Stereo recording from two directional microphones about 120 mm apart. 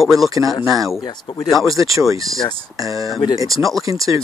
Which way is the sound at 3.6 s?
Centre (ahead or behind).